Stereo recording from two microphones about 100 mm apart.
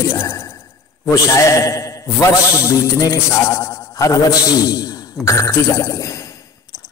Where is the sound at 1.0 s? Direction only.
35° left (ahead or behind).